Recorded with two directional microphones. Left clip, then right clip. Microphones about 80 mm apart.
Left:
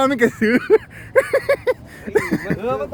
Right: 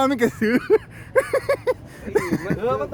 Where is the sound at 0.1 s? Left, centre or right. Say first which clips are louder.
Left 4 dB; centre.